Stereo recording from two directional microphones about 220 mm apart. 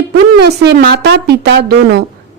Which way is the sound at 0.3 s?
50° right (ahead or behind).